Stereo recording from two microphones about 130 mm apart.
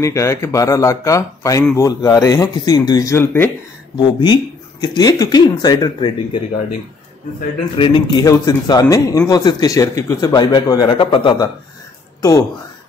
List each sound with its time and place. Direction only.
0.0 s a man's voice: 25° left (ahead or behind)
3.9 s speech: 35° left (ahead or behind)
7.7 s speech: 40° left (ahead or behind)
8.2 s a man's voice: 30° left (ahead or behind)
12.2 s speech: 25° left (ahead or behind)